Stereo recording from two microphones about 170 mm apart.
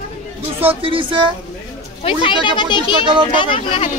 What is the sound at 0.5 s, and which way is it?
Speech, 30° right (ahead or behind).